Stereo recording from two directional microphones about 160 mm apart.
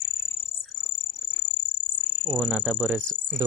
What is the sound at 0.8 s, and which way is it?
Cricket, 15° left (ahead or behind).